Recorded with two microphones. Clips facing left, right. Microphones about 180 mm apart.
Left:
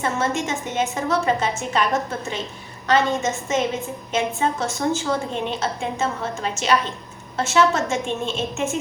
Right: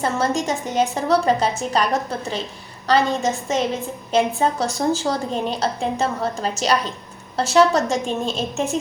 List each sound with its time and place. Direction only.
0.0 s a woman's voice: 35° right (ahead or behind)